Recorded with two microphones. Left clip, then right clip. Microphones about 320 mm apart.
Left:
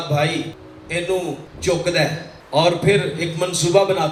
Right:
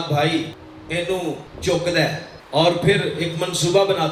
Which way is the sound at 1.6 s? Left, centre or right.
Centre.